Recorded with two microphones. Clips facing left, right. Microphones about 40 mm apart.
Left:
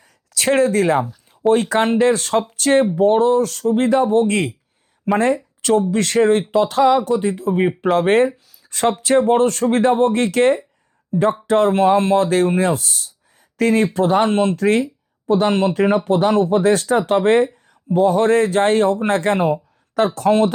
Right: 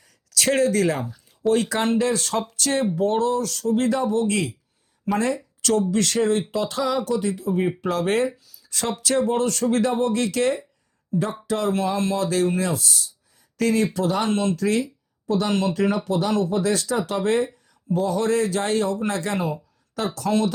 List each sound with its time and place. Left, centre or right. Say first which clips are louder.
0.3 s speech: left 4 dB; left